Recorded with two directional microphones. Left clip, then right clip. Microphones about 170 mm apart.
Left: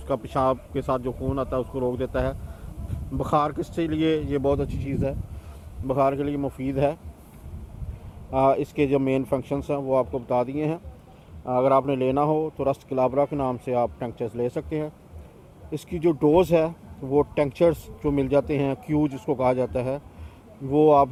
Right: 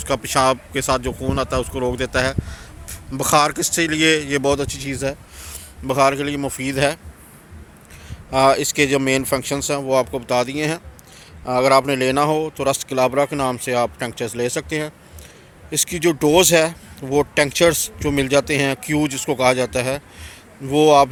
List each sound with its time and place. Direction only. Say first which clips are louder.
0.0 s speech: right 6 dB; 25° right (ahead or behind); by 5.1 s 40° right (ahead or behind)
5.9 s speech: right 6 dB; 20° right (ahead or behind)
8.4 s speech: right 6 dB; 15° right (ahead or behind)
11.5 s speech: right 5 dB; 65° right (ahead or behind)
11.9 s speech: right 5 dB; 15° right (ahead or behind)